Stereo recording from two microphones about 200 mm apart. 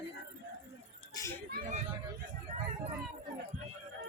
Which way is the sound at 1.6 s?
35° right (ahead or behind).